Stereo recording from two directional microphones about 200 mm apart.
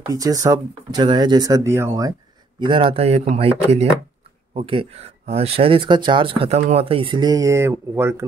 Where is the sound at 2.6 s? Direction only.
25° right (ahead or behind).